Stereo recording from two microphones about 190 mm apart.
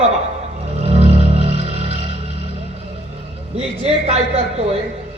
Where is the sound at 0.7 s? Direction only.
35° right (ahead or behind).